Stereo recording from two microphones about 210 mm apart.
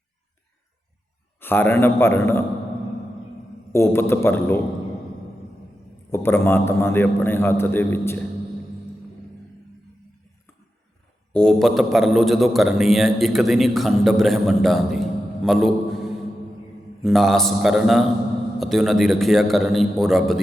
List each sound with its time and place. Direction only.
1.4 s a man's voice: 10° left (ahead or behind)
3.7 s a man's voice: 10° left (ahead or behind)
6.1 s a man's voice: 10° left (ahead or behind)
11.3 s a man's voice: 5° left (ahead or behind)